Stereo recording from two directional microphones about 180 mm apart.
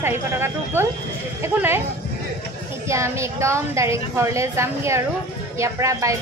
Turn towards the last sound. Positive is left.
turn(degrees=-15)  # may be behind; listen again after turning